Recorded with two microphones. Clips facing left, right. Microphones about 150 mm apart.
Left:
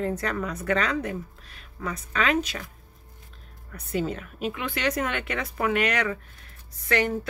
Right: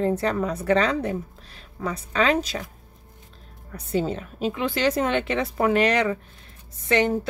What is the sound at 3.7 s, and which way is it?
Speech, 30° right (ahead or behind).